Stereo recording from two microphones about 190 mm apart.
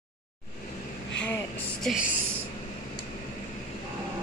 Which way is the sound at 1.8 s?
Centre (ahead or behind).